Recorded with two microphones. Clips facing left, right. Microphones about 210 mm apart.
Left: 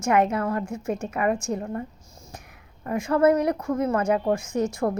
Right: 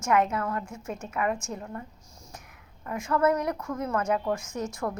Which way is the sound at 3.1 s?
30° left (ahead or behind).